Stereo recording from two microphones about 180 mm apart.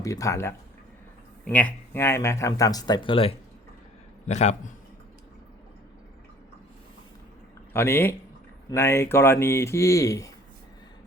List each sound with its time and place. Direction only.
0.0 s a man's voice: 15° left (ahead or behind); by 4.7 s 40° left (ahead or behind)
7.7 s speech: 15° left (ahead or behind)